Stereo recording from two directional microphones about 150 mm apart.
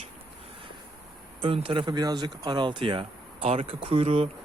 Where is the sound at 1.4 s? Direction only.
35° right (ahead or behind).